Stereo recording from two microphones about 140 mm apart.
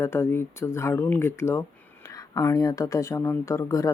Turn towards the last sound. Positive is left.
turn(degrees=20)  # may be behind; listen again after turning